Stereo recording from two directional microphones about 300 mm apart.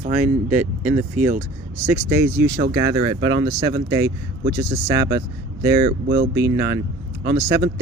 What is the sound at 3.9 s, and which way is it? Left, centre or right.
Speech, centre.